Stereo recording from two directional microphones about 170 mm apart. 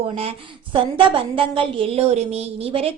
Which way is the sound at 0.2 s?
35° right (ahead or behind).